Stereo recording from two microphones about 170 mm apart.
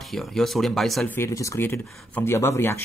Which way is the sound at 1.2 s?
20° left (ahead or behind).